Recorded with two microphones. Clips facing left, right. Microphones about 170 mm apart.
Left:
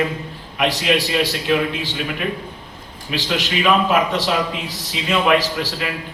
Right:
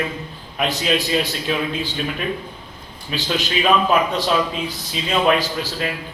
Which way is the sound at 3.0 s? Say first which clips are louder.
Left 1 dB; 85° left.